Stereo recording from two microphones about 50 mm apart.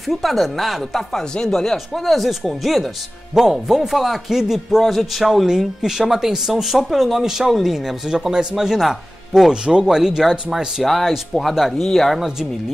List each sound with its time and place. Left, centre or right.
0.0 s speech: centre
9.5 s speech: centre
10.8 s speech: centre